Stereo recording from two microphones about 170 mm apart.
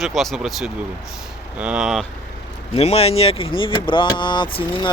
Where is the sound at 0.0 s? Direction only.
Centre (ahead or behind).